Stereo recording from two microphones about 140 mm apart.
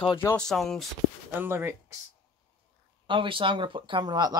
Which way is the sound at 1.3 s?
15° right (ahead or behind).